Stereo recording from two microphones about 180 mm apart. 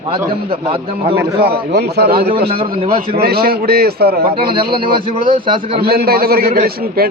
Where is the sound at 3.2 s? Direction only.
60° right (ahead or behind).